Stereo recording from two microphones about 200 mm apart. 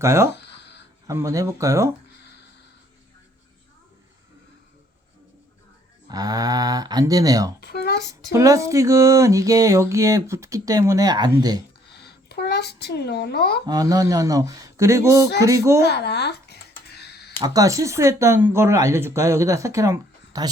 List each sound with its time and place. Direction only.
0.0 s speech: 15° right (ahead or behind)
6.1 s speech: 20° right (ahead or behind)
7.6 s a child's voice: 55° left (ahead or behind)
8.3 s speech: 15° right (ahead or behind)
11.9 s a sound: 55° left (ahead or behind)
13.7 s speech: 15° right (ahead or behind)
15.8 s a sound: 55° left (ahead or behind)
17.4 s speech: 15° right (ahead or behind)